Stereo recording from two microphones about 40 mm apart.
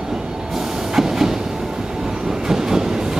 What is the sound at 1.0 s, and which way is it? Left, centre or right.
Train, centre.